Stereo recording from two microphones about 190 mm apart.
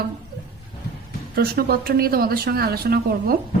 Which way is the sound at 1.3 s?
55° right (ahead or behind).